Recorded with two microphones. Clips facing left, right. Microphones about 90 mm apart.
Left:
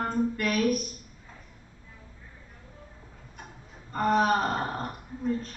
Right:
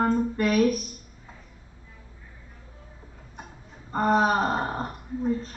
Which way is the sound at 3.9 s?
20° right (ahead or behind).